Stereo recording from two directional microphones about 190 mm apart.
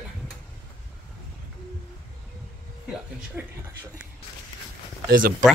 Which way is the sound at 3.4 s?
5° right (ahead or behind).